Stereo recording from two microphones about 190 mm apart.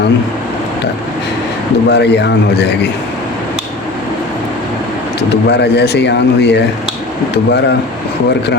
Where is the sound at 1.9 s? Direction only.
65° left (ahead or behind).